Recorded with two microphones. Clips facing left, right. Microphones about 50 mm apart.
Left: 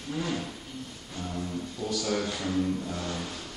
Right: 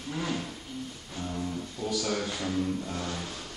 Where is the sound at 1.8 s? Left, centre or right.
Centre.